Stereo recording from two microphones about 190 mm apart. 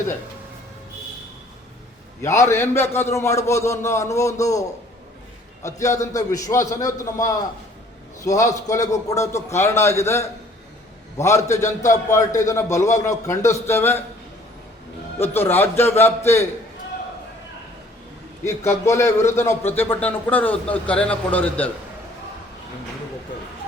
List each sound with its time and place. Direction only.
2.2 s speech: 15° left (ahead or behind)
5.6 s speech: 15° left (ahead or behind)
15.2 s speech: 10° left (ahead or behind)
18.9 s speech: 15° left (ahead or behind)